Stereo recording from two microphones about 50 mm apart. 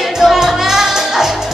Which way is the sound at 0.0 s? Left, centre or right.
Centre.